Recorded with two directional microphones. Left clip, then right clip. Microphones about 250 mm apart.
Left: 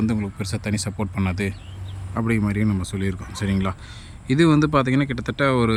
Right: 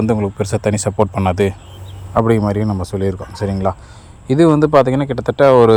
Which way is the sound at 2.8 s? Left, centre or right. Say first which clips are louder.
Right 9 dB; centre.